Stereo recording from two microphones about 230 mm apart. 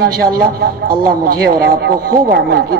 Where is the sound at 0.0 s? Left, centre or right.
Right.